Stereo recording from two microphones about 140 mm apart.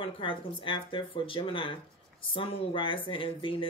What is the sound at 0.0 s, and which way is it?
Speech, 40° left (ahead or behind).